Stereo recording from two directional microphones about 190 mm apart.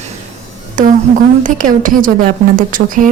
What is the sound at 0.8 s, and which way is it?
Speech, 40° right (ahead or behind).